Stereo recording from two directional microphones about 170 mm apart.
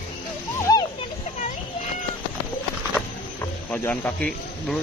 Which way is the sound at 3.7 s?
10° left (ahead or behind).